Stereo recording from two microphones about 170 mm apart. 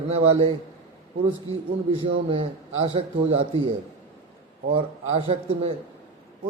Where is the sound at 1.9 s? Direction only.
30° right (ahead or behind).